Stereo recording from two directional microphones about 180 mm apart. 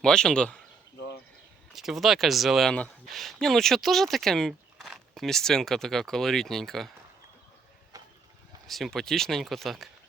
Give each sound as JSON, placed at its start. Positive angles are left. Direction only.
{"t": 0.0, "sound": "speech", "side_deg": 5}
{"t": 0.9, "sound": "a sound", "side_deg": 70}
{"t": 1.7, "sound": "speech", "side_deg": 0}
{"t": 7.9, "sound": "mechanisms", "side_deg": -20}
{"t": 8.6, "sound": "speech", "side_deg": 0}